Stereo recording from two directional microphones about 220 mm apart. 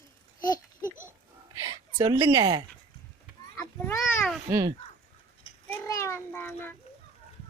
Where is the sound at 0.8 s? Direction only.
10° right (ahead or behind).